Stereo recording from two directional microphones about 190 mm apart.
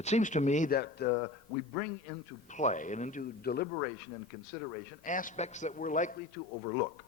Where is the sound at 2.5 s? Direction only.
40° left (ahead or behind).